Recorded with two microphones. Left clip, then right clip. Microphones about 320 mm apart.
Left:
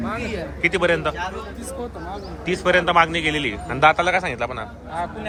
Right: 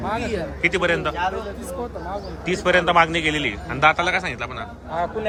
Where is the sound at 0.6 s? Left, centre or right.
Centre.